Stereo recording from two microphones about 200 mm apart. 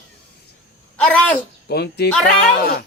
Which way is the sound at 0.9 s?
5° left (ahead or behind).